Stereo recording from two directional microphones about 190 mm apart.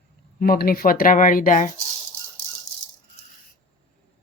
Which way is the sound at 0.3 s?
50° left (ahead or behind).